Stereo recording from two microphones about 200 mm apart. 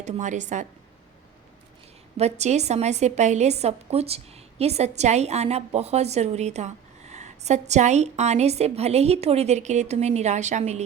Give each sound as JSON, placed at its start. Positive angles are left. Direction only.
{"t": 0.0, "sound": "a woman's voice", "side_deg": -35}
{"t": 2.1, "sound": "a woman's voice", "side_deg": -35}